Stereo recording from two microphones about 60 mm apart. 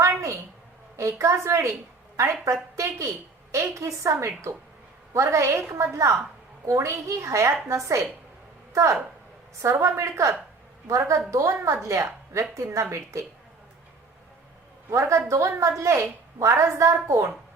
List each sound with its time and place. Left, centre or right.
0.9 s a woman's voice: right
14.8 s a woman's voice: right